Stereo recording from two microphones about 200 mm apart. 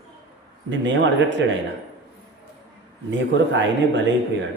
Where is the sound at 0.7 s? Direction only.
65° right (ahead or behind).